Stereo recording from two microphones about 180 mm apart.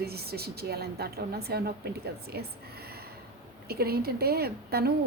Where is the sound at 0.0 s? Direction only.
60° right (ahead or behind).